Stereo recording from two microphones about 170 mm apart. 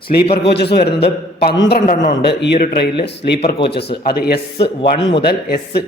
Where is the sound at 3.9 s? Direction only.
70° left (ahead or behind).